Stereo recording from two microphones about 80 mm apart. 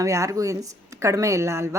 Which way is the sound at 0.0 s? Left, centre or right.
Right.